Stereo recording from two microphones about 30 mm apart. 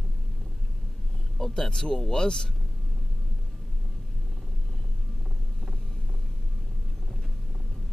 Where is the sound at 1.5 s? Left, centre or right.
Left.